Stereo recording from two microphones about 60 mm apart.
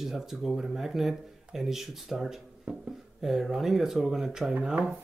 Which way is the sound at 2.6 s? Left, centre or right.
Centre.